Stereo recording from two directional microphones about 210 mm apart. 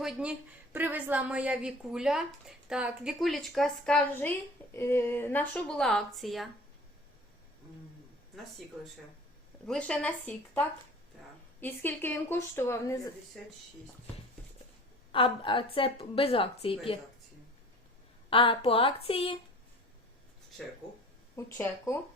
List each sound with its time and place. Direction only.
0.0 s a woman's voice: 5° right (ahead or behind)
9.6 s a woman's voice: 5° left (ahead or behind)
13.4 s a woman's voice: centre (ahead or behind)
15.1 s a woman's voice: 25° left (ahead or behind)
18.3 s a woman's voice: 25° left (ahead or behind)
21.3 s a woman's voice: 15° left (ahead or behind)